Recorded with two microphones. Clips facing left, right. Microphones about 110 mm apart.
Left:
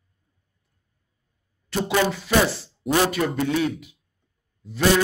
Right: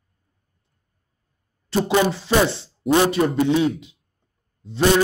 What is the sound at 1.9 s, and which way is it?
Speech, 25° right (ahead or behind).